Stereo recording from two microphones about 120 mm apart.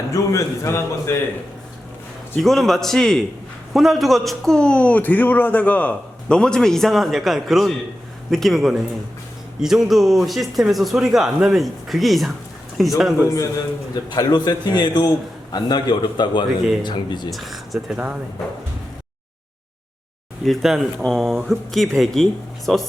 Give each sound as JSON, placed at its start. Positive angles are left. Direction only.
{"t": 0.1, "sound": "a man's voice", "side_deg": 25}
{"t": 2.4, "sound": "a man's voice", "side_deg": 0}
{"t": 13.2, "sound": "a man's voice", "side_deg": 25}
{"t": 17.3, "sound": "speech", "side_deg": 0}
{"t": 20.4, "sound": "a man's voice", "side_deg": 0}